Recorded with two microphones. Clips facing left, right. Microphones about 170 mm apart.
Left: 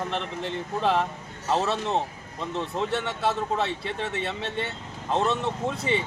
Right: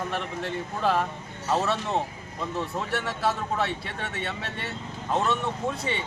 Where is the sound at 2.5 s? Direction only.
25° left (ahead or behind).